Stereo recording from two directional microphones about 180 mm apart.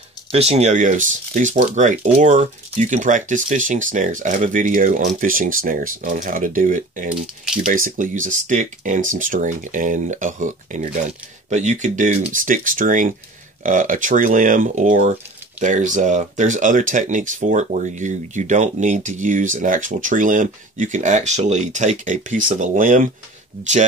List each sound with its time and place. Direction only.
0.3 s speech: 35° right (ahead or behind)